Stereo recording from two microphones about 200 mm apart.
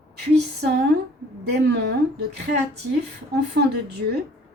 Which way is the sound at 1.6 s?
55° right (ahead or behind).